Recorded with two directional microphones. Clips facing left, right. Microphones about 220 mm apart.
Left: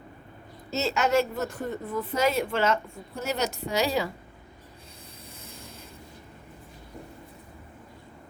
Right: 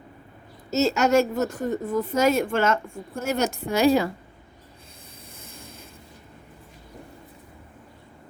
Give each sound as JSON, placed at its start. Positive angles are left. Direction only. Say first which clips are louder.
{"t": 0.7, "sound": "a woman's voice", "louder": "right 5 dB", "side_deg": -45}